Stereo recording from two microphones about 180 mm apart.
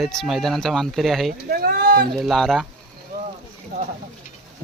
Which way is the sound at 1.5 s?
55° right (ahead or behind).